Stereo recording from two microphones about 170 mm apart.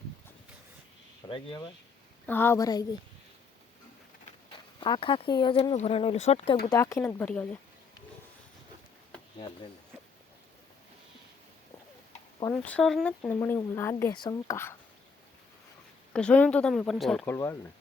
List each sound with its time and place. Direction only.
1.3 s speech: 30° left (ahead or behind)
2.2 s speech: 10° left (ahead or behind)
4.8 s speech: 30° left (ahead or behind)
6.7 s speech: 15° left (ahead or behind)
12.5 s speech: 5° left (ahead or behind)
16.1 s speech: 5° left (ahead or behind)
17.2 s speech: 15° left (ahead or behind)